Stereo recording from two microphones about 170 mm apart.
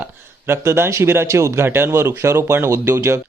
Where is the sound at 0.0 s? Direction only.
15° right (ahead or behind).